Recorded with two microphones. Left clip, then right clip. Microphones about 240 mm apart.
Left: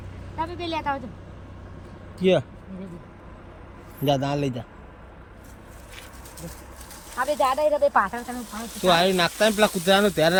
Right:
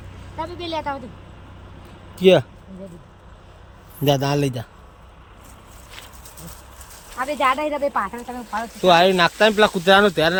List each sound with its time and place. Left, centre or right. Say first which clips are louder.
0.3 s a woman's voice: right 1 dB; centre
2.1 s speech: right 7 dB; centre
4.0 s speech: right 4 dB; centre
7.2 s speech: right 2 dB; left
7.9 s speech: left 2 dB; left
8.8 s speech: right 5 dB; centre